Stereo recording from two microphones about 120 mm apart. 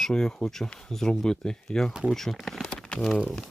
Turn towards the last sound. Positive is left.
turn(degrees=5)  # may be behind; listen again after turning